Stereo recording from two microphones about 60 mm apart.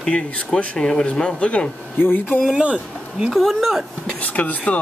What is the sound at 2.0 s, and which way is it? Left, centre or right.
Speech, left.